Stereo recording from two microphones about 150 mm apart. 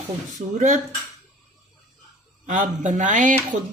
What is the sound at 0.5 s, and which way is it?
Speech, 55° right (ahead or behind).